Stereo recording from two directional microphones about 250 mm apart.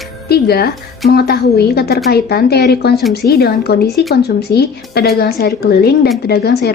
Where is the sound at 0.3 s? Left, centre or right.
Left.